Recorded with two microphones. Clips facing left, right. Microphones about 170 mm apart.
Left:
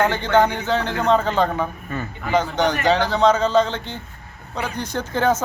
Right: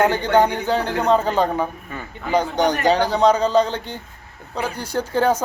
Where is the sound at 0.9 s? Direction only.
10° right (ahead or behind).